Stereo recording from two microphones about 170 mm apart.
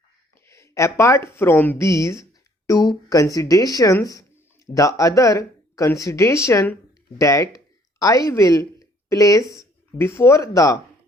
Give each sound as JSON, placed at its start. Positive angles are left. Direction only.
{"t": 0.4, "sound": "speech", "side_deg": 15}
{"t": 7.2, "sound": "a sound", "side_deg": 20}
{"t": 8.3, "sound": "speech", "side_deg": 20}